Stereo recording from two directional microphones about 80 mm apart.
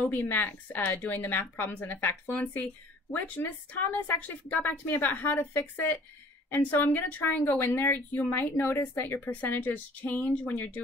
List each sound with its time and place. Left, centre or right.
0.2 s speech: left